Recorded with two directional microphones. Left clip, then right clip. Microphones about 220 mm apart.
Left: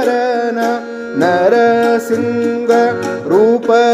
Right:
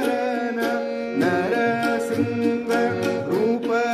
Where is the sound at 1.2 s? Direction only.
45° left (ahead or behind).